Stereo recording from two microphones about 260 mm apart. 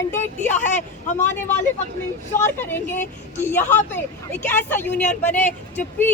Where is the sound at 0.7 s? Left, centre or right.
Left.